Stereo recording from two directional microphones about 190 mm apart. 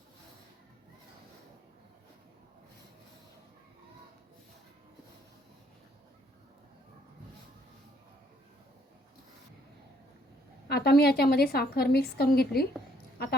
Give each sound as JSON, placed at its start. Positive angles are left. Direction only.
{"t": 10.7, "sound": "a woman's voice", "side_deg": 60}